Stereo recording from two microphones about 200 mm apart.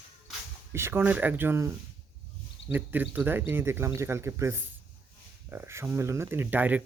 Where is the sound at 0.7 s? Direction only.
10° right (ahead or behind).